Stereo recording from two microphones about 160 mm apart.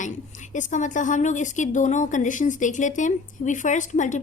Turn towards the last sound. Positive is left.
turn(degrees=50)  # may be behind; listen again after turning